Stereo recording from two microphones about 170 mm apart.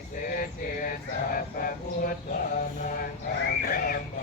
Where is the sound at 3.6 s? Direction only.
55° left (ahead or behind).